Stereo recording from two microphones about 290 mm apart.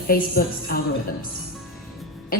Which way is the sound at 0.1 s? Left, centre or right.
Left.